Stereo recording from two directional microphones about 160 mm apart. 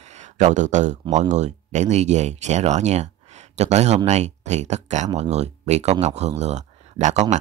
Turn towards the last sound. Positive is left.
turn(degrees=-45)  # may be behind; listen again after turning